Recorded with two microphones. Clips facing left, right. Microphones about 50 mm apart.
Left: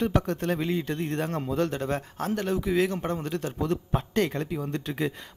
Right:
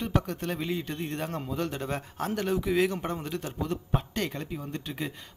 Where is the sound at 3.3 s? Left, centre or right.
Left.